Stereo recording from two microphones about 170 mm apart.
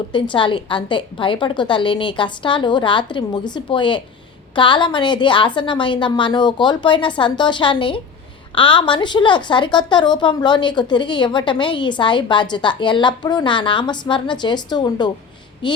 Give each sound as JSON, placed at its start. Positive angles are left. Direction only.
{"t": 0.1, "sound": "a woman's voice", "side_deg": 30}